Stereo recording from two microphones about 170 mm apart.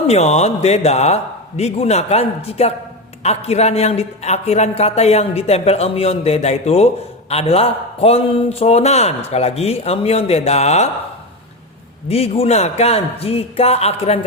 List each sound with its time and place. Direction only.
0.1 s a man's voice: 40° left (ahead or behind)
12.0 s a man's voice: 35° left (ahead or behind)